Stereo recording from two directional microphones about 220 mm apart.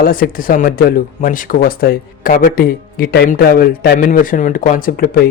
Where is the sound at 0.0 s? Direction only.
40° left (ahead or behind).